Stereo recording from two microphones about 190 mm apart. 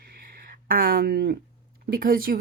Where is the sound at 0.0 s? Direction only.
50° right (ahead or behind).